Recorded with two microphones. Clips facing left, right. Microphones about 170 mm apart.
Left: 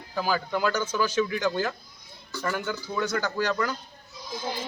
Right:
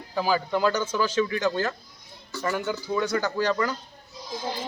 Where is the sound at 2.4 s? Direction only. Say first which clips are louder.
Right 2 dB; 5° right (ahead or behind).